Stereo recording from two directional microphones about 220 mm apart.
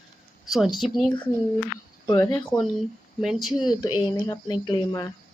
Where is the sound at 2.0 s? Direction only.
15° left (ahead or behind).